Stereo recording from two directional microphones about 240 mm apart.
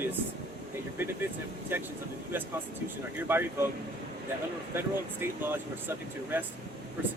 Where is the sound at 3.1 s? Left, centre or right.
Centre.